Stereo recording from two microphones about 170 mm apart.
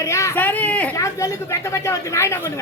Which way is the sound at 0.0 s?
15° left (ahead or behind).